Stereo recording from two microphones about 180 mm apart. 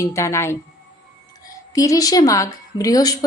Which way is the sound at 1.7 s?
20° left (ahead or behind).